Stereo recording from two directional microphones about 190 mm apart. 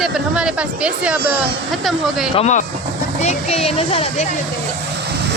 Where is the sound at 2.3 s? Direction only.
35° left (ahead or behind).